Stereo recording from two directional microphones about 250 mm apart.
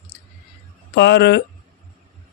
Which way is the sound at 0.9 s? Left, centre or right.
Left.